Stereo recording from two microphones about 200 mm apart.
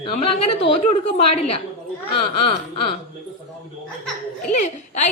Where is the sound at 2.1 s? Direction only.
25° left (ahead or behind).